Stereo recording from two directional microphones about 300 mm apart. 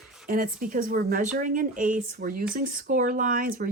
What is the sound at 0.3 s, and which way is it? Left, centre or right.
Speech, right.